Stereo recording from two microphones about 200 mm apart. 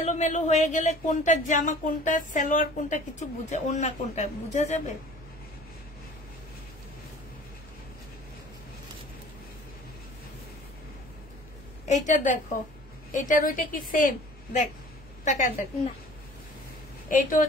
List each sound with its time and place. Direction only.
0.0 s speech: 35° left (ahead or behind)
11.9 s speech: 40° left (ahead or behind)
17.1 s speech: 40° left (ahead or behind)